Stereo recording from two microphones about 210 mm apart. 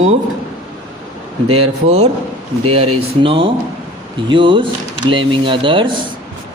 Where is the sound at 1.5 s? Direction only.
30° right (ahead or behind).